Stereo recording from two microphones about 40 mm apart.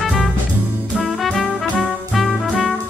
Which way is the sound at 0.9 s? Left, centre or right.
Centre.